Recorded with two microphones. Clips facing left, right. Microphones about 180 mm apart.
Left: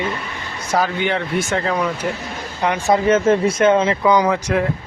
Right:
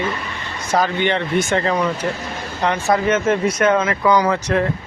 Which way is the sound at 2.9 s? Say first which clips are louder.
Left 3 dB; 30° left (ahead or behind).